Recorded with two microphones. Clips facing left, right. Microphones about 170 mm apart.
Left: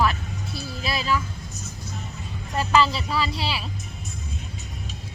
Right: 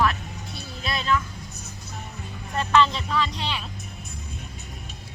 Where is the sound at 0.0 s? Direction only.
Centre (ahead or behind).